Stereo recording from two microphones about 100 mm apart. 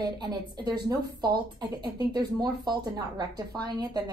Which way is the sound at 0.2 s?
45° right (ahead or behind).